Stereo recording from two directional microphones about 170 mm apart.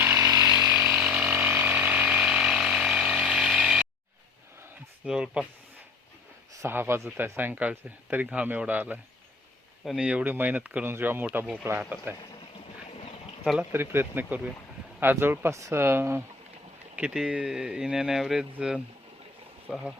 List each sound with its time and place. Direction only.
0.0 s chainsaw: 15° right (ahead or behind)
0.8 s a sound: 5° right (ahead or behind)
5.0 s speech: 5° right (ahead or behind)
6.5 s speech: 15° right (ahead or behind)
13.4 s speech: 5° right (ahead or behind)